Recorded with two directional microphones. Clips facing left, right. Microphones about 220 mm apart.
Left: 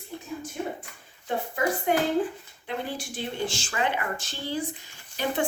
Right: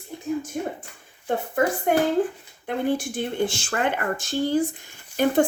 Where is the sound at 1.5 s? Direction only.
50° right (ahead or behind).